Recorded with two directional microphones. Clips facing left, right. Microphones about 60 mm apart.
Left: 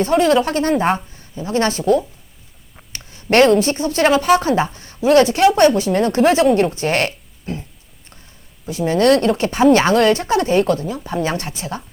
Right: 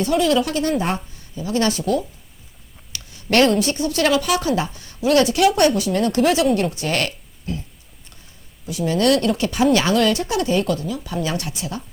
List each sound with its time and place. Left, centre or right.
0.0 s speech: left
2.7 s a sound: left
3.6 s speech: left
8.6 s speech: left